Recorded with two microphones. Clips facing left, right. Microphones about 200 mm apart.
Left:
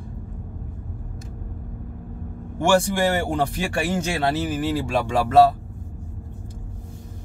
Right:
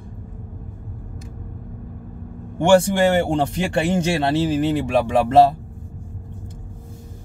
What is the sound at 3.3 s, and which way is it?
Speech, 20° right (ahead or behind).